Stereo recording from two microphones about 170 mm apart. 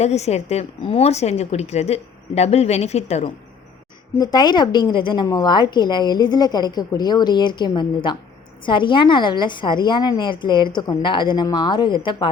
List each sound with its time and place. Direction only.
0.0 s a woman's voice: 40° left (ahead or behind)
4.2 s a woman's voice: 25° left (ahead or behind)